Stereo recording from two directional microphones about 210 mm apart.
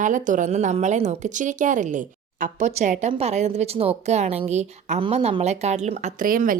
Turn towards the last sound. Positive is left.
turn(degrees=-40)  # may be behind; listen again after turning